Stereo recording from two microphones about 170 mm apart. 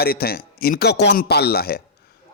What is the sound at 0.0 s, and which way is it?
A man's voice, 65° left (ahead or behind).